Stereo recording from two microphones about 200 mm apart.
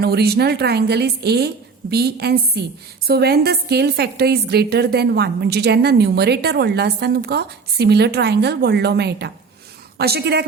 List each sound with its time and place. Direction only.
0.0 s a woman's voice: 50° right (ahead or behind)